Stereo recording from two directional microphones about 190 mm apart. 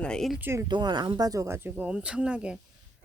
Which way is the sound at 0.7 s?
25° right (ahead or behind).